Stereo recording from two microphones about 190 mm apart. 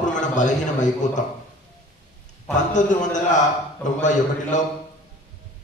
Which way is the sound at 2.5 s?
40° left (ahead or behind).